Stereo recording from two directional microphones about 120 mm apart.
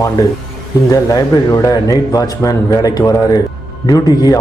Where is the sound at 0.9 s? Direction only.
25° left (ahead or behind).